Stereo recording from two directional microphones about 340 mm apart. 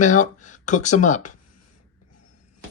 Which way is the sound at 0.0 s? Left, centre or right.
Left.